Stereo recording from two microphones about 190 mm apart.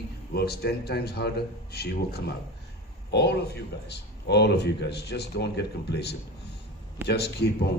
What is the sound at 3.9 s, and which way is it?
A man's voice, 60° left (ahead or behind).